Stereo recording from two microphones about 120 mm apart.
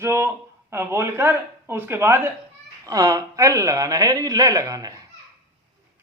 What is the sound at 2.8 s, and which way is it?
Speech, 30° right (ahead or behind).